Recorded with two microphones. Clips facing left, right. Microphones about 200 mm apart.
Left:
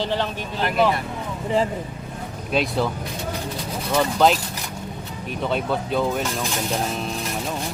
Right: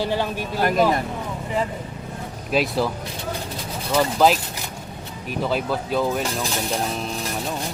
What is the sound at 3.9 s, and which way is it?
Speech, 5° right (ahead or behind).